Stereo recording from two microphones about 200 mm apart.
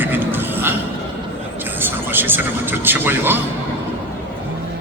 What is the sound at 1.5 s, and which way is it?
Speech, 10° right (ahead or behind).